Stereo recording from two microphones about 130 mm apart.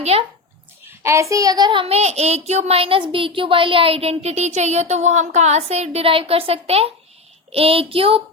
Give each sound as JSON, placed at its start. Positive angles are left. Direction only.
{"t": 0.0, "sound": "a child's voice", "side_deg": -50}
{"t": 0.9, "sound": "speech", "side_deg": -20}